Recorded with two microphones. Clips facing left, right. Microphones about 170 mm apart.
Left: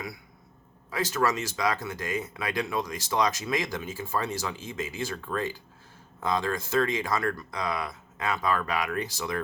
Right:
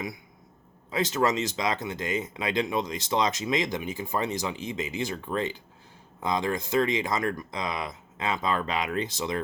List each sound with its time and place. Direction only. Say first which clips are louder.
0.9 s speech: right 2 dB; 20° right (ahead or behind)